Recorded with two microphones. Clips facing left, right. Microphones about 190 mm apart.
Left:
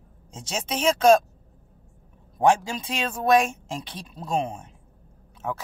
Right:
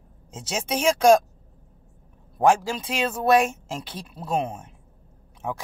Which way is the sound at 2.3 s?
Centre (ahead or behind).